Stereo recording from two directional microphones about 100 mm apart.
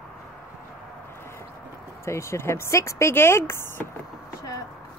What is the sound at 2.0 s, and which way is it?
Speech, 30° left (ahead or behind).